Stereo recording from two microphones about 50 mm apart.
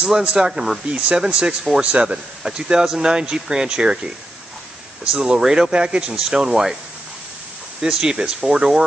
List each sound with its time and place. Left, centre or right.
0.2 s speech: right
1.8 s speech: right
2.4 s speech: centre
5.1 s speech: centre
7.8 s speech: centre